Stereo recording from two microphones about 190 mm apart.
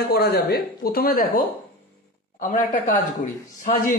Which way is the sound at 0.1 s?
55° left (ahead or behind).